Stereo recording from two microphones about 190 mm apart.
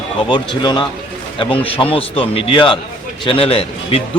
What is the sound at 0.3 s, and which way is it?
A man's voice, 25° left (ahead or behind).